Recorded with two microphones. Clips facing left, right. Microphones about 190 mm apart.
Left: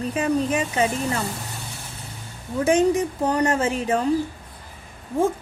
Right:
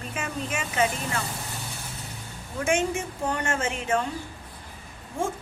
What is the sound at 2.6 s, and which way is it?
Speech, 35° left (ahead or behind).